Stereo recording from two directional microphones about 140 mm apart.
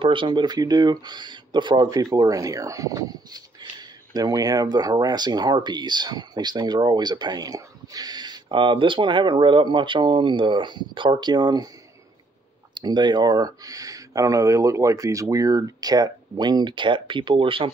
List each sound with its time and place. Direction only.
0.0 s speech: 35° right (ahead or behind)
12.7 s speech: 30° right (ahead or behind)